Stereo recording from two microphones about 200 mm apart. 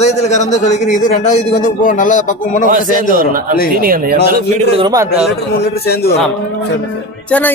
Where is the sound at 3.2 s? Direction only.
45° right (ahead or behind).